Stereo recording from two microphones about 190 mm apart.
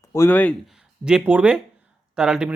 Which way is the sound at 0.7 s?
5° right (ahead or behind).